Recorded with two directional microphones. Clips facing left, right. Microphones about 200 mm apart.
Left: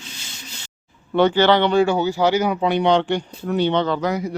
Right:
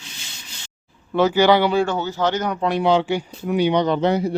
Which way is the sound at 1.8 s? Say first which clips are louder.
Left 4 dB; 10° left (ahead or behind).